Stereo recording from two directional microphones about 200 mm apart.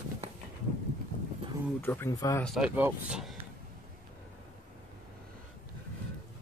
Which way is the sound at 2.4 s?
Centre (ahead or behind).